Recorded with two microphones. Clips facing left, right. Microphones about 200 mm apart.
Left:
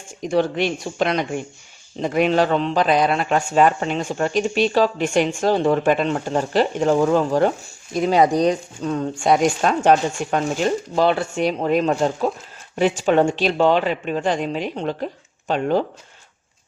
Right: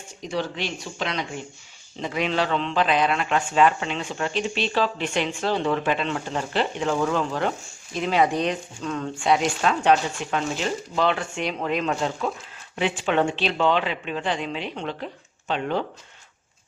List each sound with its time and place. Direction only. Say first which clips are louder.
0.2 s a man's voice: left 9 dB; 50° left (ahead or behind)